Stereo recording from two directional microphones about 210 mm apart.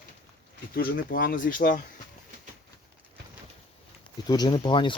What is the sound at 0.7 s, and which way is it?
Speech, 45° left (ahead or behind).